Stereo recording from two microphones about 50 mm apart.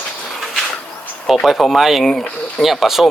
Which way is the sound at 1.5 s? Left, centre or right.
Centre.